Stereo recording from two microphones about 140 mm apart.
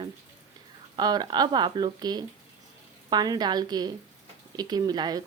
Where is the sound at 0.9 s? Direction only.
30° right (ahead or behind).